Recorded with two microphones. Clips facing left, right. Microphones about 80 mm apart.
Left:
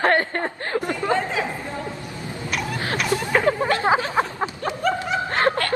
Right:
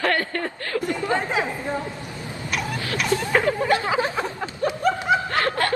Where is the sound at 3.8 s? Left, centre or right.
Left.